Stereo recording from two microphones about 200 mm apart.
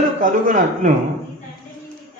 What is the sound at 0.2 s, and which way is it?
Speech, 40° right (ahead or behind).